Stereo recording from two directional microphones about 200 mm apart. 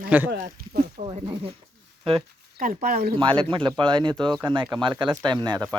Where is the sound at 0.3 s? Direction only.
45° right (ahead or behind).